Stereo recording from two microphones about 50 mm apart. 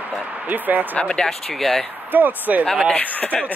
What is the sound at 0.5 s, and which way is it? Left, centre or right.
Speech, right.